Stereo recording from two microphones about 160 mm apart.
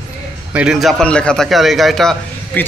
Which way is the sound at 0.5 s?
5° right (ahead or behind).